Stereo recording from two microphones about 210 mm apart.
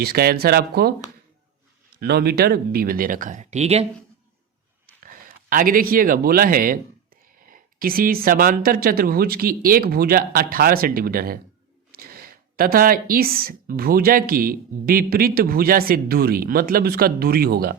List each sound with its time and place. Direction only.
0.0 s a woman's voice: 45° right (ahead or behind)
2.0 s a woman's voice: 50° right (ahead or behind); by 3.8 s 30° right (ahead or behind)
5.0 s a woman's voice: 40° right (ahead or behind)